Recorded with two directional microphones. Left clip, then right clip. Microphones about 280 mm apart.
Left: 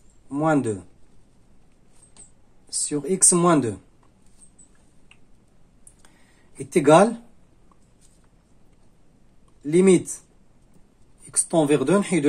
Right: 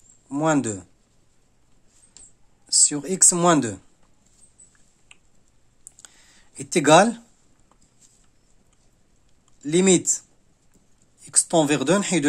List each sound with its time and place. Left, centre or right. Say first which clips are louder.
0.3 s speech: even; right
2.9 s speech: even; right
6.0 s a sound: right 3 dB; right
9.6 s speech: left 2 dB; right
11.2 s speech: right 1 dB; right